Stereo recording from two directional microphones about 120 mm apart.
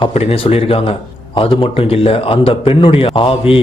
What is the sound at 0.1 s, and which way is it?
A man's voice, 55° left (ahead or behind).